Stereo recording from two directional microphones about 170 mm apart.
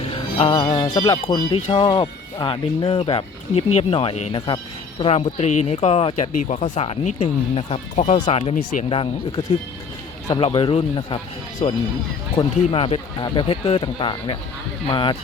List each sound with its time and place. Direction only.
0.1 s music: 30° left (ahead or behind)
0.7 s speech: 30° left (ahead or behind)